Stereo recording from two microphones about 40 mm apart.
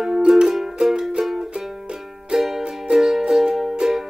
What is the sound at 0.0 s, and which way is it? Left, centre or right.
Music, centre.